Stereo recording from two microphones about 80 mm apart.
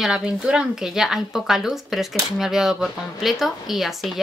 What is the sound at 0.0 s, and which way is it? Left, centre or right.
Speech, centre.